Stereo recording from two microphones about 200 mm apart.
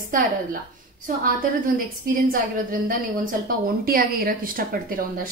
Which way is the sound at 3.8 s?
50° right (ahead or behind).